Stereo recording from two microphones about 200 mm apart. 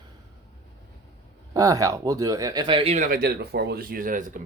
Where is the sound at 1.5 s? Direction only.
15° right (ahead or behind).